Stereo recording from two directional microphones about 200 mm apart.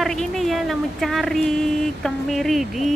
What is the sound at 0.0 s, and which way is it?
Speech, centre (ahead or behind).